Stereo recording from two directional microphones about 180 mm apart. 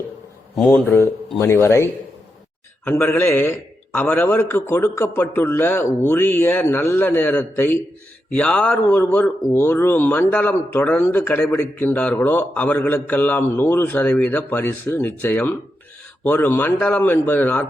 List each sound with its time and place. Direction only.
0.5 s speech: centre (ahead or behind)
0.9 s speech: 15° left (ahead or behind)